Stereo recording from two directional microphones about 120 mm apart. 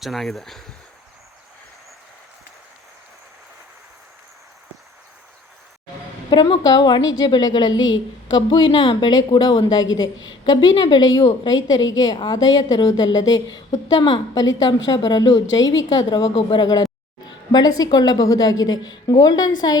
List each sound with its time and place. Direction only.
0.0 s speech: centre (ahead or behind)
6.3 s a woman's voice: 35° left (ahead or behind)